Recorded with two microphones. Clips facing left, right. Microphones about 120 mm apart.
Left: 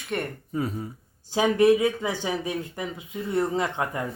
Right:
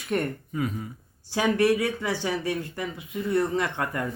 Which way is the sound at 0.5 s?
35° left (ahead or behind).